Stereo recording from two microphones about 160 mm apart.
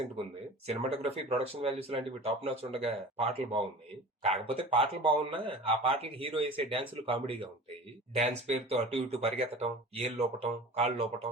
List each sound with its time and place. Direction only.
0.7 s speech: 40° right (ahead or behind)
8.1 s speech: 45° right (ahead or behind)